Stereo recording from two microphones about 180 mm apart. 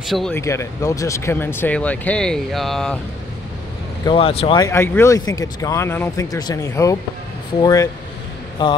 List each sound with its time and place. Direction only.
0.0 s speech: centre (ahead or behind)
0.3 s speech: 15° left (ahead or behind)
4.0 s speech: 30° left (ahead or behind)
4.6 s speech: 15° left (ahead or behind)